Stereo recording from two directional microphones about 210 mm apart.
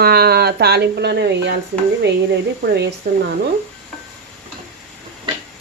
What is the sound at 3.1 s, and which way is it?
Speech, 45° right (ahead or behind).